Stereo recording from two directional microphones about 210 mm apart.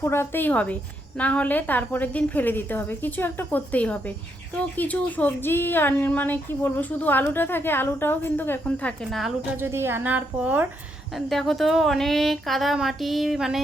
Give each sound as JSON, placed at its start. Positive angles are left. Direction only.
{"t": 0.0, "sound": "speech", "side_deg": 10}
{"t": 9.6, "sound": "a woman's voice", "side_deg": -10}